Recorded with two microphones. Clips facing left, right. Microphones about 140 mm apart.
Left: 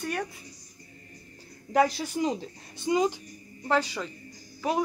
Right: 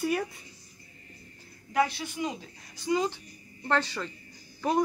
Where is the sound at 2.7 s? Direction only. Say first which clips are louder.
Left 3 dB; 20° left (ahead or behind).